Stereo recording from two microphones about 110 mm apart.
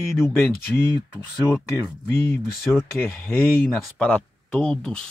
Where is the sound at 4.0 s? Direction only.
10° left (ahead or behind).